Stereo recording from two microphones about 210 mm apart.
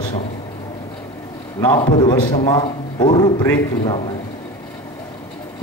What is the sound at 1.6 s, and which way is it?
A man's voice, 20° left (ahead or behind).